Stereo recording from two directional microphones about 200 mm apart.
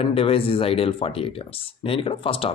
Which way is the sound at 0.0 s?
30° left (ahead or behind).